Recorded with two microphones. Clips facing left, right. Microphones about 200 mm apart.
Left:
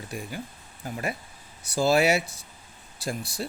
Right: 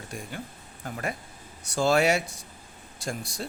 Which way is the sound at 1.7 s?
5° left (ahead or behind).